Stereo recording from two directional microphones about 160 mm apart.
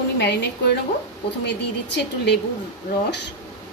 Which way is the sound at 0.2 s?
90° left.